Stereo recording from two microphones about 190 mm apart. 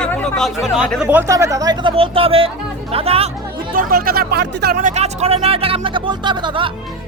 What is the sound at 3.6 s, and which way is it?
Speech, 50° right (ahead or behind).